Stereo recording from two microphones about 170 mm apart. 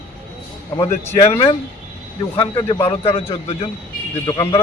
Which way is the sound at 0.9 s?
35° left (ahead or behind).